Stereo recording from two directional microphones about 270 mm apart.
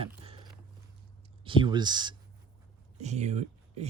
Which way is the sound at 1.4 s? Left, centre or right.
Centre.